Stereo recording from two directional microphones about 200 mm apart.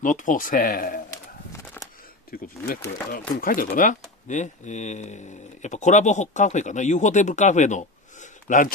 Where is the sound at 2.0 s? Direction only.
45° left (ahead or behind).